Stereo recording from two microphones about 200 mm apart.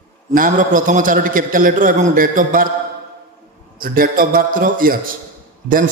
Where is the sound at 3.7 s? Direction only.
45° right (ahead or behind).